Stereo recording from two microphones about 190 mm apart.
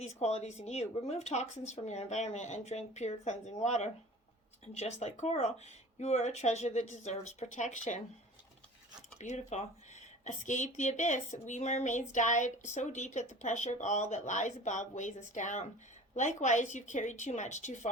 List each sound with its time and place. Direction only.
0.0 s speech: 35° left (ahead or behind)
9.1 s speech: 40° left (ahead or behind)